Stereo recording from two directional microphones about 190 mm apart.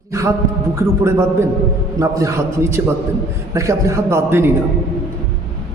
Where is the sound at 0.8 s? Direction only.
15° right (ahead or behind).